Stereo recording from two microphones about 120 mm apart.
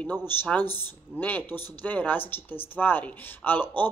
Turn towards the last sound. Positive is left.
turn(degrees=15)  # may be behind; listen again after turning